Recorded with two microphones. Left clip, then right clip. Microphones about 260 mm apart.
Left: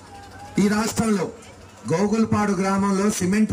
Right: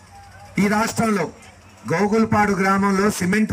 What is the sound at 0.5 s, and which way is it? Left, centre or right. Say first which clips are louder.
A man's voice: right 3 dB; centre.